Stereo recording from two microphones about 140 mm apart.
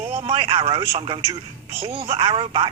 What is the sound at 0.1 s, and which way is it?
Speech, 40° right (ahead or behind).